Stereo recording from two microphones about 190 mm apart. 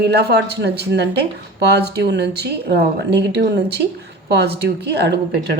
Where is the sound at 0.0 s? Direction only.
60° right (ahead or behind).